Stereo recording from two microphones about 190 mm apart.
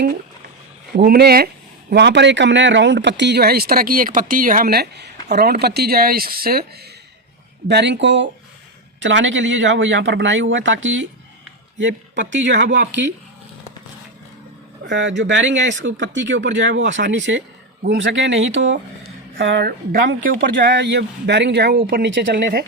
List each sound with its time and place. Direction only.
0.9 s speech: 55° right (ahead or behind)
1.9 s speech: 65° right (ahead or behind)
7.7 s a man's voice: 65° right (ahead or behind)
14.8 s a man's voice: 75° right (ahead or behind); by 20.7 s 50° right (ahead or behind)
20.7 s speech: 65° right (ahead or behind)